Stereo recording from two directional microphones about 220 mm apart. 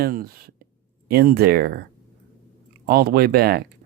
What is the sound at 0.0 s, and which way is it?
Speech, 40° right (ahead or behind).